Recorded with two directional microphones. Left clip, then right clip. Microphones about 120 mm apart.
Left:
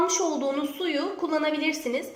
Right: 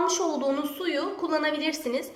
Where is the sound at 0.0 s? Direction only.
15° left (ahead or behind).